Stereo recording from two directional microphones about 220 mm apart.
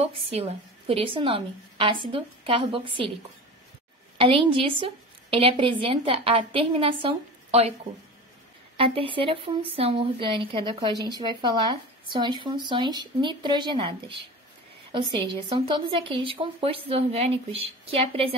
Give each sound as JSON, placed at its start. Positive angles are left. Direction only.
{"t": 0.0, "sound": "speech", "side_deg": -25}
{"t": 4.2, "sound": "speech", "side_deg": -25}
{"t": 8.7, "sound": "speech", "side_deg": -25}